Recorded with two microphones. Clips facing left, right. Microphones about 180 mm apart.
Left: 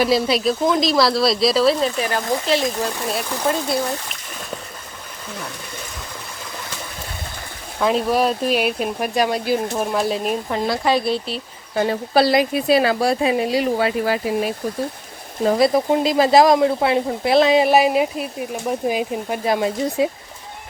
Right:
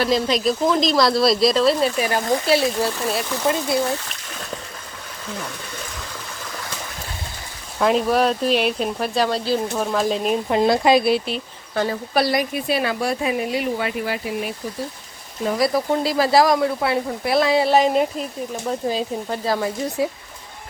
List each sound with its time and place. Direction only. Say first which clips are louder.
0.0 s speech: left 2 dB; 10° left (ahead or behind)
2.0 s speech: right 1 dB; 10° right (ahead or behind)
7.8 s speech: even; centre (ahead or behind)
10.5 s speech: right 5 dB; 15° right (ahead or behind)
11.7 s speech: left 2 dB; 15° left (ahead or behind)
12.1 s speech: left 4 dB; 30° left (ahead or behind)
12.6 s speech: left 6 dB; 90° left
12.9 s speech: left 4 dB; 35° left (ahead or behind)
15.4 s speech: left 4 dB; 25° left (ahead or behind)